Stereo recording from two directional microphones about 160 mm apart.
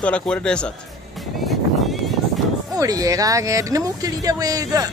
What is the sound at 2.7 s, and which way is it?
Speech, 20° right (ahead or behind).